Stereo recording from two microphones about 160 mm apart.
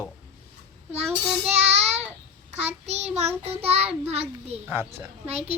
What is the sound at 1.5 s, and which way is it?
Child singing, 40° right (ahead or behind).